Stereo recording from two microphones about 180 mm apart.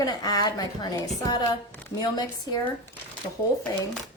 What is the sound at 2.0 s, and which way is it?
Speech, 20° left (ahead or behind).